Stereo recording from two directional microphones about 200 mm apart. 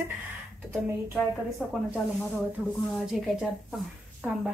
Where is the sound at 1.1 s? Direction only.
Centre (ahead or behind).